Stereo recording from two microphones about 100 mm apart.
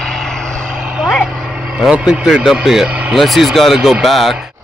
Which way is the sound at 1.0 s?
Centre (ahead or behind).